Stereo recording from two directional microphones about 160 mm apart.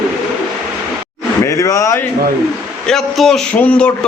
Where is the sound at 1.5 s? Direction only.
20° left (ahead or behind).